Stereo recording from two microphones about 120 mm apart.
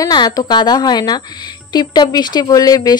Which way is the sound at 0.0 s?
35° left (ahead or behind).